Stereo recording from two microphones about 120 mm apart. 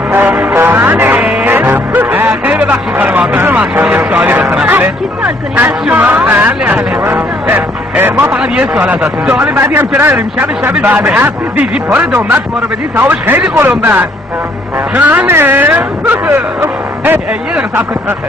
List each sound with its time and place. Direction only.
0.1 s music: 15° right (ahead or behind)
9.0 s speech: 5° right (ahead or behind)
9.4 s a man's voice: 15° right (ahead or behind)